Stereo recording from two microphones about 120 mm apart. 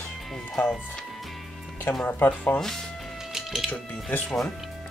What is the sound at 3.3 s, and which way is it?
Music, centre (ahead or behind).